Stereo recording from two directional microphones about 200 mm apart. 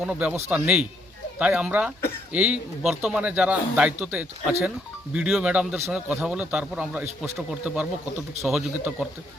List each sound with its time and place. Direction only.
0.0 s a man's voice: 10° right (ahead or behind)